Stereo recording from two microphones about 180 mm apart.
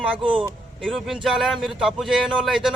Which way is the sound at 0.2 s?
30° right (ahead or behind).